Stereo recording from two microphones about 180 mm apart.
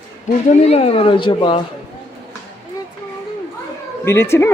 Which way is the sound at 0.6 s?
35° left (ahead or behind).